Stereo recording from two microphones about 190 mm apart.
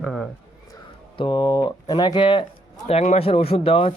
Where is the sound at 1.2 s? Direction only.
25° left (ahead or behind).